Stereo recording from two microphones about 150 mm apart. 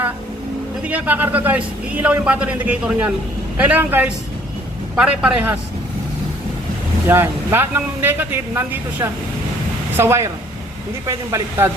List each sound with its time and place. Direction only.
0.9 s a man's voice: 10° right (ahead or behind)
7.1 s a man's voice: 15° right (ahead or behind)